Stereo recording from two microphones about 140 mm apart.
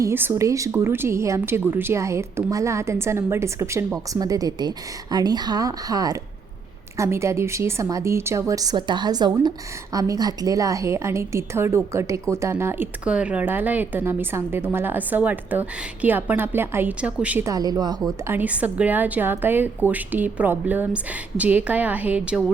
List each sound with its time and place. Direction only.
0.0 s a woman's voice: 15° right (ahead or behind)
17.4 s speech: 25° right (ahead or behind)
18.3 s a woman's voice: 10° right (ahead or behind)